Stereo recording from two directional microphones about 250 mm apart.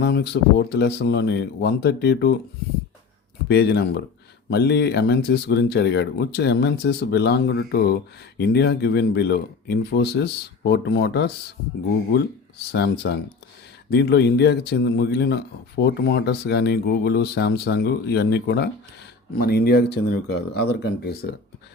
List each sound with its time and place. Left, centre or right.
0.0 s speech: left
3.5 s speech: left
12.7 s speech: left